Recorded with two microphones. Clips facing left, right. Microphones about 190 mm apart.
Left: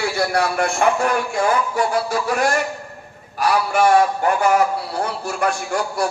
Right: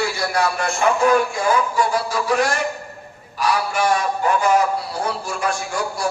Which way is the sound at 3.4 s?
55° left (ahead or behind).